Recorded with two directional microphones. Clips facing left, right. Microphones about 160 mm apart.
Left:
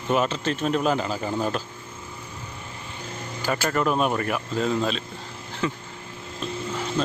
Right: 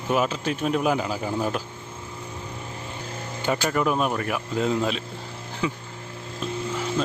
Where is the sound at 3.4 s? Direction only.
20° right (ahead or behind).